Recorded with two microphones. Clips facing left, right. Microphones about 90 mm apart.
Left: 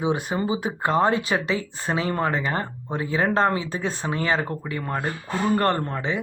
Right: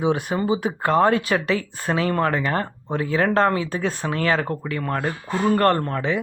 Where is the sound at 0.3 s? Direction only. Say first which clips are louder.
Right 3 dB; 35° right (ahead or behind).